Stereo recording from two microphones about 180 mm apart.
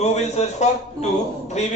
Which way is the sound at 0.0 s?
35° left (ahead or behind).